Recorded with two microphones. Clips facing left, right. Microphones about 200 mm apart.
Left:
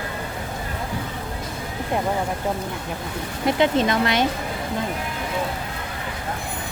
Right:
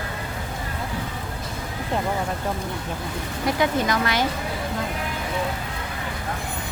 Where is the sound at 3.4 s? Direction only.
25° left (ahead or behind).